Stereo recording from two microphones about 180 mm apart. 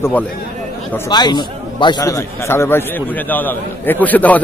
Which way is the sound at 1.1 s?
25° left (ahead or behind).